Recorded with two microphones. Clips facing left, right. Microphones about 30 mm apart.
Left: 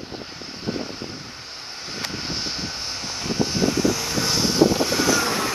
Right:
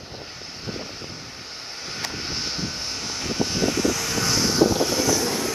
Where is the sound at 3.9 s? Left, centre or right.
Centre.